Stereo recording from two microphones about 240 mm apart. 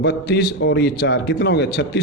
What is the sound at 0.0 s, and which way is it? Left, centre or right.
A man's voice, left.